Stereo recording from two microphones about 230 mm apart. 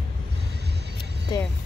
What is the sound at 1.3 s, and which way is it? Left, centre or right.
Speech, centre.